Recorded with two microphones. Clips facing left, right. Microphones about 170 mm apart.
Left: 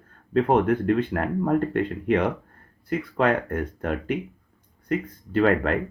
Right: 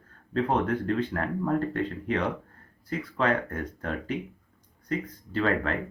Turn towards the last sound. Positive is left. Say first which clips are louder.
# left 6 dB
turn(degrees=60)  # may be behind; listen again after turning